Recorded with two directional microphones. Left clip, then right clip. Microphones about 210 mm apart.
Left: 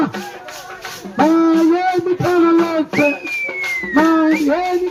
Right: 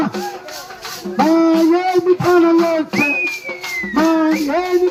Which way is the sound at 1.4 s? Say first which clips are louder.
Even; 50° left (ahead or behind).